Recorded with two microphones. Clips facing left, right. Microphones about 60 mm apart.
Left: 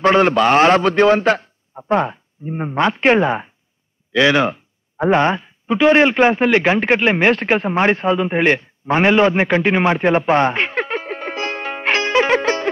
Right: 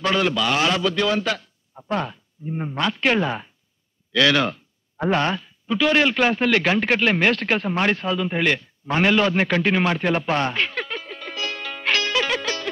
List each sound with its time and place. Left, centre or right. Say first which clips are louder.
0.0 s a man's voice: left 8 dB; left